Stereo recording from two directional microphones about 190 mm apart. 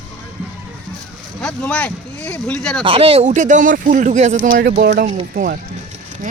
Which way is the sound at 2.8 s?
30° right (ahead or behind).